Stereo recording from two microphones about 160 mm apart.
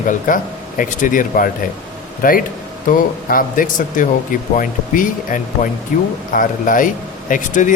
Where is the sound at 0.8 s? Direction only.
55° left (ahead or behind).